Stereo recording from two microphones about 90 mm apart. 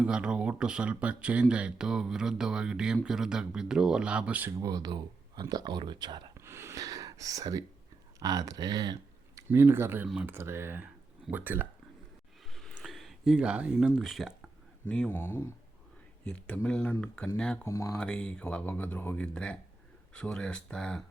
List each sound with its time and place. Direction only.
0.0 s speech: 10° right (ahead or behind)
4.4 s speech: 35° right (ahead or behind); by 6.3 s 50° right (ahead or behind)
6.3 s a sound: 30° right (ahead or behind)
6.7 s speech: 40° right (ahead or behind)
9.5 s speech: 25° right (ahead or behind)
12.5 s a sound: 5° left (ahead or behind)
12.8 s speech: centre (ahead or behind)
14.8 s speech: 15° left (ahead or behind)
16.2 s speech: 10° left (ahead or behind)
17.6 s speech: 30° left (ahead or behind)
17.9 s speech: 10° left (ahead or behind)